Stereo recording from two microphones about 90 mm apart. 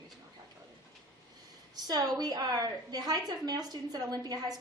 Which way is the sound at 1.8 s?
50° right (ahead or behind).